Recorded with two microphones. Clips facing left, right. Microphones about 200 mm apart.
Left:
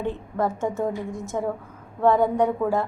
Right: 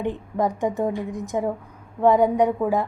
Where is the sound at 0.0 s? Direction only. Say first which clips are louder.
Right 2 dB; 15° right (ahead or behind).